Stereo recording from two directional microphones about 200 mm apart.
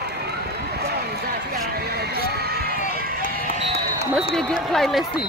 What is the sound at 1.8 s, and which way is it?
Music, 55° right (ahead or behind).